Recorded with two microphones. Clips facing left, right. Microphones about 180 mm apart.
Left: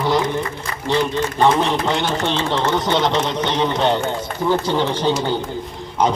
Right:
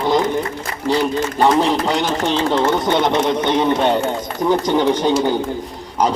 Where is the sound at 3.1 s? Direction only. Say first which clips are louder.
Right 4 dB; 15° right (ahead or behind).